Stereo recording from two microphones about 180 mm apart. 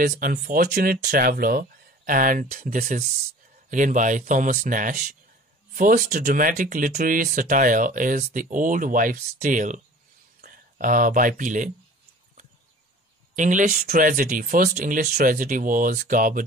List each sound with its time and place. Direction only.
0.0 s speech: 50° right (ahead or behind)
13.4 s speech: 45° right (ahead or behind)